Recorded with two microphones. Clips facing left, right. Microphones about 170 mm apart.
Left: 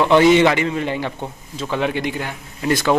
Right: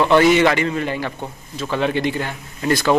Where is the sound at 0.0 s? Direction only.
15° left (ahead or behind).